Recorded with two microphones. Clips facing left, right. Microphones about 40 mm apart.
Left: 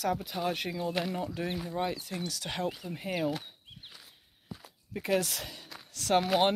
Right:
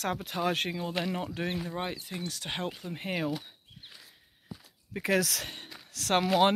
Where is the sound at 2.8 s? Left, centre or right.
Right.